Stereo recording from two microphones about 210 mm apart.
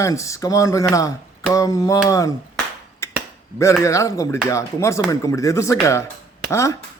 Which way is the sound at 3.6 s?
15° left (ahead or behind).